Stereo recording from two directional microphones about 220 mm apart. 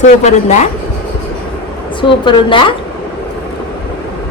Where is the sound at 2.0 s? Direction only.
20° left (ahead or behind).